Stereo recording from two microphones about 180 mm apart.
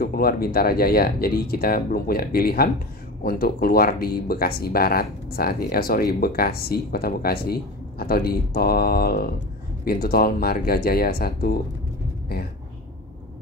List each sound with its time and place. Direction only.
0.0 s speech: 55° left (ahead or behind)